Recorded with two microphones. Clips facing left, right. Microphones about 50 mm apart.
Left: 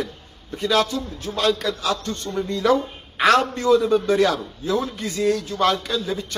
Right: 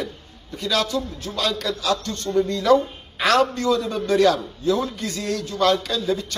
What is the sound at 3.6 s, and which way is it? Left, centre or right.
A man's voice, centre.